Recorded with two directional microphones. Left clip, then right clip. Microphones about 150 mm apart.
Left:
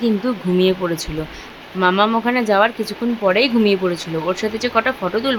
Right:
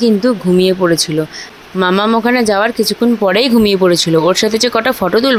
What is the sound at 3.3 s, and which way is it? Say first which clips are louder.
Speech: right 2 dB; 60° right (ahead or behind).